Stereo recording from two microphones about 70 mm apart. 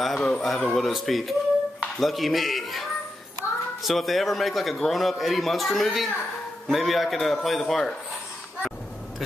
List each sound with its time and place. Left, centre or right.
0.0 s a man's voice: centre